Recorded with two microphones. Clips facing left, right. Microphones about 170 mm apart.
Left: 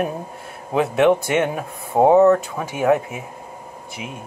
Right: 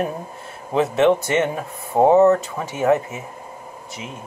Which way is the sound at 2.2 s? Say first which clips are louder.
Left 1 dB; 5° right (ahead or behind).